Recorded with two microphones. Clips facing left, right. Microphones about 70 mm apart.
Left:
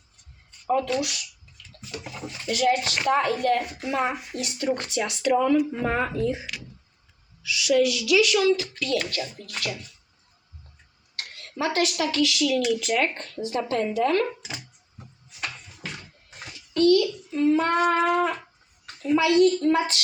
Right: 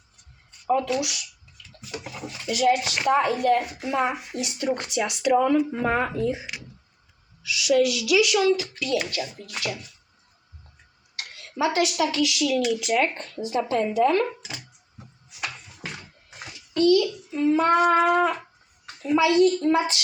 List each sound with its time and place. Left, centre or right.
0.8 s speech: centre
7.4 s speech: centre
11.5 s speech: centre
15.4 s a sound: centre
16.7 s a child's voice: centre